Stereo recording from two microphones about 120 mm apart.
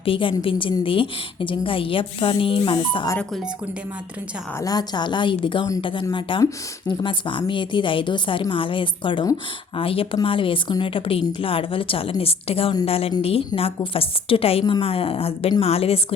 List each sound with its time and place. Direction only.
0.0 s a woman's voice: 45° left (ahead or behind)
4.6 s a woman's voice: 30° left (ahead or behind); by 16.1 s 55° left (ahead or behind)